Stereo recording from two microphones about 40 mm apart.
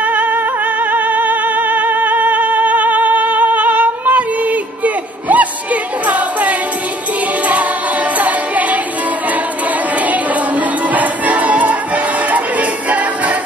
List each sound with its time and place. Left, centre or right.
0.0 s music: right
8.2 s music: right
9.9 s music: right